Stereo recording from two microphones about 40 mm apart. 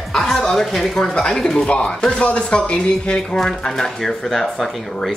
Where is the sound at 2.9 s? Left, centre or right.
Centre.